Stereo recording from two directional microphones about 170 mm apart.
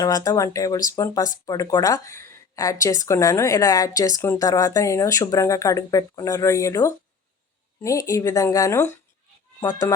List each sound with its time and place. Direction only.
0.0 s speech: 20° left (ahead or behind)